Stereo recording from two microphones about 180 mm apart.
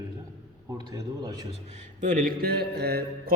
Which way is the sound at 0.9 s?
20° right (ahead or behind).